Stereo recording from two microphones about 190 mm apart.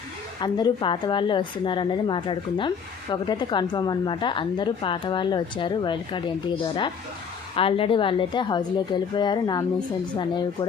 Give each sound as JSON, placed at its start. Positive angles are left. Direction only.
{"t": 0.3, "sound": "a woman's voice", "side_deg": 25}
{"t": 7.5, "sound": "a woman's voice", "side_deg": 30}